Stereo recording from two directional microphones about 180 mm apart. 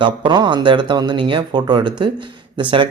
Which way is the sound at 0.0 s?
25° right (ahead or behind).